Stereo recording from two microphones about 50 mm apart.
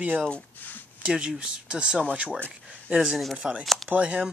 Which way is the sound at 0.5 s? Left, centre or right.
Left.